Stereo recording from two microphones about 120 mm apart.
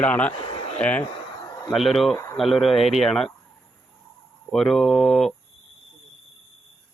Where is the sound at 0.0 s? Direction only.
10° left (ahead or behind).